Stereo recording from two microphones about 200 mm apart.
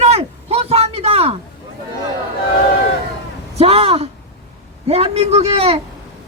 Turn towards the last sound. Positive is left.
turn(degrees=-30)  # may be behind; listen again after turning